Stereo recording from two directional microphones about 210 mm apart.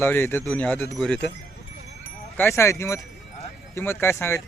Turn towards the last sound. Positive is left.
turn(degrees=10)  # may be behind; listen again after turning